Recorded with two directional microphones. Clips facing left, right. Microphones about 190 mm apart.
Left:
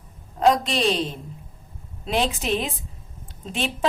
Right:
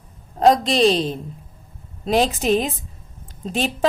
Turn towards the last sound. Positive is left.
turn(degrees=-40)  # may be behind; listen again after turning